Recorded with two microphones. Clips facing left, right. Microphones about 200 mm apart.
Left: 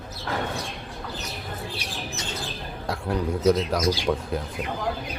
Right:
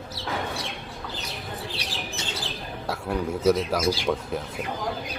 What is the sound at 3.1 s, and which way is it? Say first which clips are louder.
Speech: left 1 dB; 5° right (ahead or behind).